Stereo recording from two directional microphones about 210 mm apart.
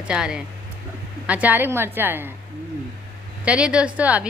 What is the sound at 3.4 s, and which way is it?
Speech, 5° right (ahead or behind).